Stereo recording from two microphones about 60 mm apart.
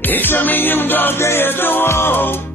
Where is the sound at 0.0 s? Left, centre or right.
Left.